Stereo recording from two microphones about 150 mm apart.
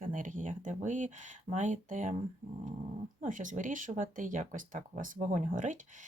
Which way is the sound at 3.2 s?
60° right (ahead or behind).